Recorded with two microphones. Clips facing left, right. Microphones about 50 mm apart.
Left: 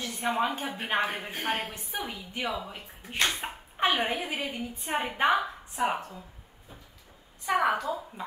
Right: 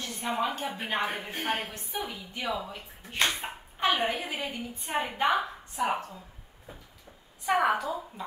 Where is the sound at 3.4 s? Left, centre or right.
Centre.